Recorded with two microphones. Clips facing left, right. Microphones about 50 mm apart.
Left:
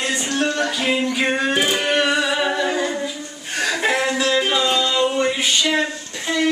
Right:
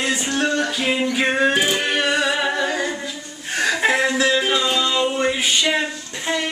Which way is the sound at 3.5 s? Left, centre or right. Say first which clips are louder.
Right 1 dB; centre.